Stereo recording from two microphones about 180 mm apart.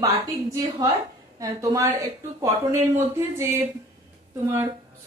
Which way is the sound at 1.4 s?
20° right (ahead or behind).